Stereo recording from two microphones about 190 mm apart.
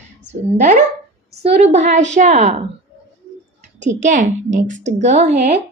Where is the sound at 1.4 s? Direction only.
35° right (ahead or behind).